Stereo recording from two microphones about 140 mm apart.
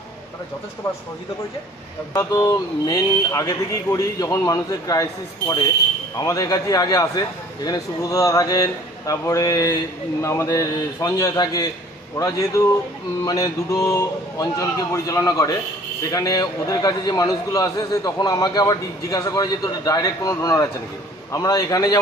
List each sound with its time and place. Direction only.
2.1 s a man's voice: 20° left (ahead or behind)
6.1 s a man's voice: 25° left (ahead or behind)